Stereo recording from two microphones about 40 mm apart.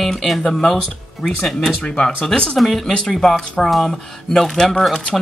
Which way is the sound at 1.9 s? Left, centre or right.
Left.